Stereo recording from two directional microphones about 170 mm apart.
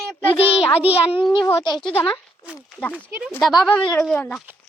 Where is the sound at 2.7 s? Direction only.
10° left (ahead or behind).